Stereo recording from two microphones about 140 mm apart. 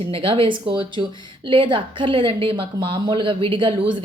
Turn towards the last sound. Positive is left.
turn(degrees=-35)  # may be behind; listen again after turning